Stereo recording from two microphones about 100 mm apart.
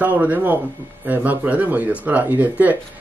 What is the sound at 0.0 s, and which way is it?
Speech, 15° right (ahead or behind).